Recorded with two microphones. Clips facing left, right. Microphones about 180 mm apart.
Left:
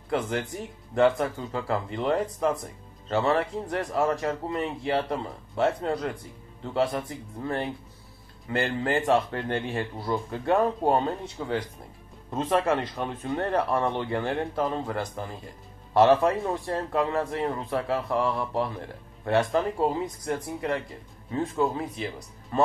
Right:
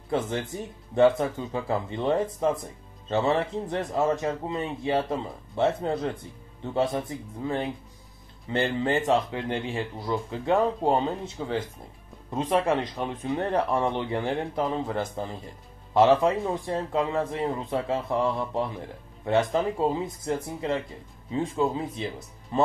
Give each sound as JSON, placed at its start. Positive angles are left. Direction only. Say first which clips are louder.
{"t": 0.1, "sound": "speech", "louder": "even", "side_deg": -25}